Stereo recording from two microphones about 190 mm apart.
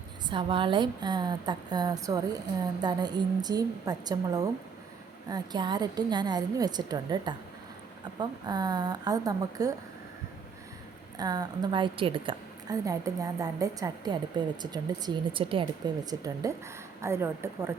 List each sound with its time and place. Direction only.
0.3 s a woman's voice: 25° right (ahead or behind)
11.2 s a woman's voice: 20° right (ahead or behind)